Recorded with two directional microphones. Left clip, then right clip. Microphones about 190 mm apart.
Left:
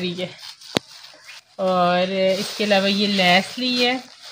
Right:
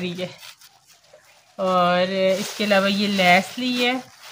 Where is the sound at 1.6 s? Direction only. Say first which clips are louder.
Even; 30° left (ahead or behind).